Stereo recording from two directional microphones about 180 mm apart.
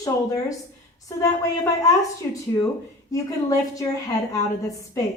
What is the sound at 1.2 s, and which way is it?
A woman's voice, 20° left (ahead or behind).